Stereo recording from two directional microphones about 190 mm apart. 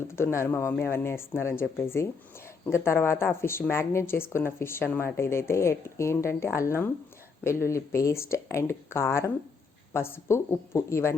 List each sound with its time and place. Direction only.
0.2 s speech: 15° left (ahead or behind)